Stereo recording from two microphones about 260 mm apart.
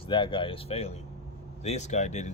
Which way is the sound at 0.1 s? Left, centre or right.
Centre.